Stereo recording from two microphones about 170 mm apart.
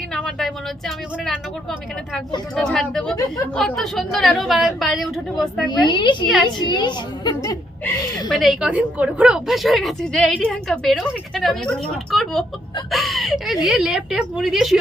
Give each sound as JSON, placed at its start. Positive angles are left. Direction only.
{"t": 0.1, "sound": "a woman's voice", "side_deg": 5}
{"t": 5.9, "sound": "a woman's voice", "side_deg": 30}
{"t": 8.3, "sound": "a woman's voice", "side_deg": -5}